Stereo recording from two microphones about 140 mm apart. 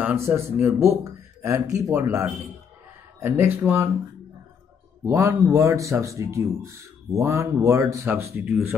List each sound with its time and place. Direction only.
0.0 s speech: 15° right (ahead or behind)
5.0 s speech: 20° right (ahead or behind)